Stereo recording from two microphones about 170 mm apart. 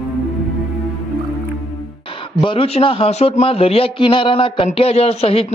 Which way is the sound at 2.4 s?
30° left (ahead or behind).